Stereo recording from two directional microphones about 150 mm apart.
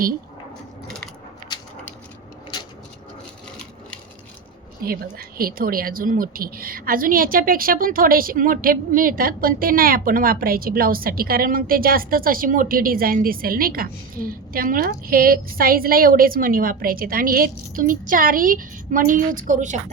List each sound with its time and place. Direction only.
0.9 s mechanisms: 5° left (ahead or behind)
1.5 s a sound: 30° left (ahead or behind)
4.8 s a woman's voice: 80° right; by 19.8 s 55° right (ahead or behind)